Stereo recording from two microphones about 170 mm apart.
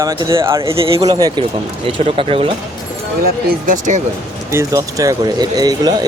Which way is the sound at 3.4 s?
55° right (ahead or behind).